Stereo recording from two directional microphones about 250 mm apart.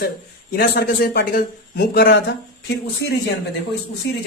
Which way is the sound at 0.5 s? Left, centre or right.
Left.